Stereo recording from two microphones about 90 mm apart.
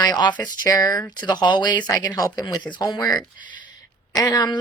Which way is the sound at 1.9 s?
45° left (ahead or behind).